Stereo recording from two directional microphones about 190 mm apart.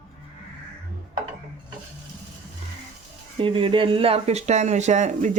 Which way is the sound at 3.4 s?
30° right (ahead or behind).